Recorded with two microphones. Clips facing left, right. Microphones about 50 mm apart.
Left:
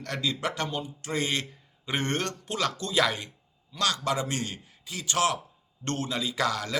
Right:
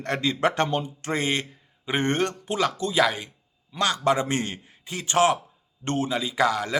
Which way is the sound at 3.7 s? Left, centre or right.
Right.